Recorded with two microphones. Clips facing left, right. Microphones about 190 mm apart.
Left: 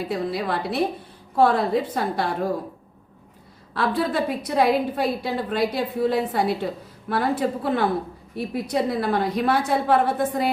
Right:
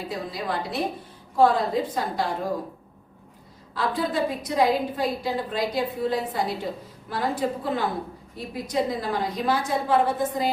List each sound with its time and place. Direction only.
0.1 s a woman's voice: 65° left (ahead or behind)
3.8 s a woman's voice: 65° left (ahead or behind)